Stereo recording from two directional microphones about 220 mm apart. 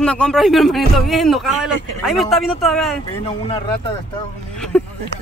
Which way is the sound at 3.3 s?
25° left (ahead or behind).